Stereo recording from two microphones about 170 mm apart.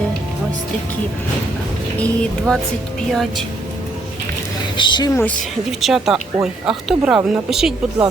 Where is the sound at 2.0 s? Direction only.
5° left (ahead or behind).